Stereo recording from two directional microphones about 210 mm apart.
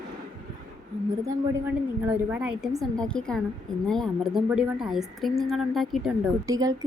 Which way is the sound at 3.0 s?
5° left (ahead or behind).